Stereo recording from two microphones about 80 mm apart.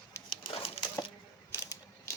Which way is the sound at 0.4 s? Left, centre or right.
Left.